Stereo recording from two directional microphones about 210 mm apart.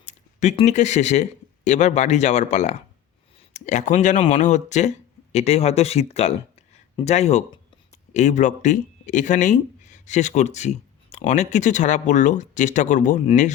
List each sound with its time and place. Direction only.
0.0 s speech: 35° left (ahead or behind)